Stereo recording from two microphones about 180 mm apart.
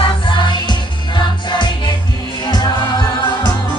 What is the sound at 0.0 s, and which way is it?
Music, 25° left (ahead or behind).